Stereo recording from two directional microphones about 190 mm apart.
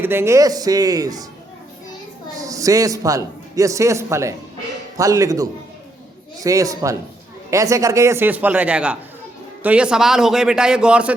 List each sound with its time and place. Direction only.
0.0 s speech: 10° right (ahead or behind)
2.4 s a man's voice: 15° right (ahead or behind)